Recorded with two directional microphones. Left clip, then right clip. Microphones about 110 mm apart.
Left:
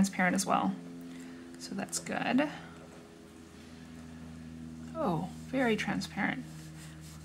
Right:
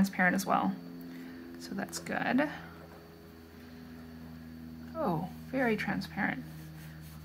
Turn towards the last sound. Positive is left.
turn(degrees=10)  # may be behind; listen again after turning